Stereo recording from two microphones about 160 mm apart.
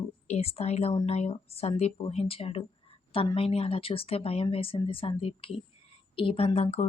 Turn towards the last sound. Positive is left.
turn(degrees=40)  # may be behind; listen again after turning